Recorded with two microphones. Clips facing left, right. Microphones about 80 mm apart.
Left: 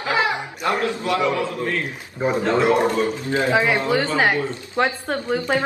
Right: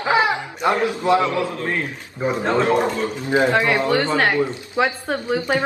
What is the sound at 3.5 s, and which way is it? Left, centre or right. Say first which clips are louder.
A woman's voice: right 1 dB; centre.